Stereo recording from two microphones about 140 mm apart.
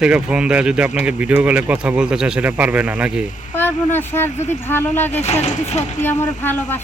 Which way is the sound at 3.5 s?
15° left (ahead or behind).